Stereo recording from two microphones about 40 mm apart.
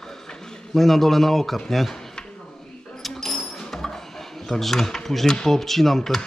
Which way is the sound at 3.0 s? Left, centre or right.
Centre.